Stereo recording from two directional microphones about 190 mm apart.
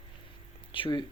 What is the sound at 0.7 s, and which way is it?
Speech, 25° left (ahead or behind).